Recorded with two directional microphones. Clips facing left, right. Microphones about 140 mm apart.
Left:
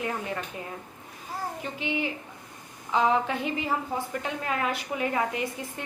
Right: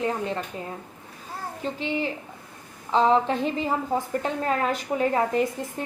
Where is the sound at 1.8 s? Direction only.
35° right (ahead or behind).